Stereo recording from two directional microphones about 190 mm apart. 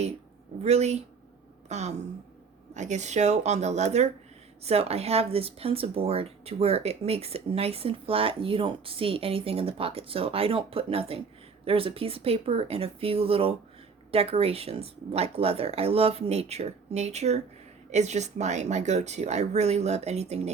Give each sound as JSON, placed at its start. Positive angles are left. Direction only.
{"t": 0.6, "sound": "speech", "side_deg": -35}